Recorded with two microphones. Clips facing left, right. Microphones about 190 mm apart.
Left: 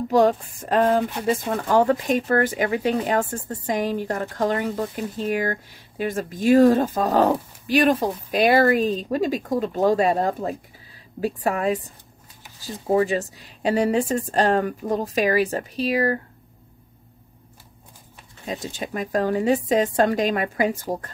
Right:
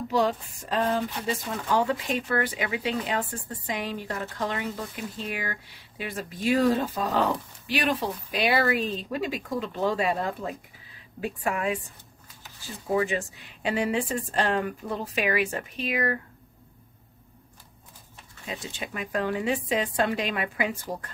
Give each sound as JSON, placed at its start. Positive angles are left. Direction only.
{"t": 0.1, "sound": "speech", "side_deg": 50}
{"t": 18.5, "sound": "speech", "side_deg": 40}